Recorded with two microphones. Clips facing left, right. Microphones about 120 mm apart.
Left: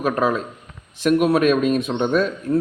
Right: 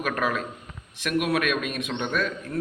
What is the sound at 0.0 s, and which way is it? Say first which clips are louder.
A man's voice: left 6 dB; 30° left (ahead or behind).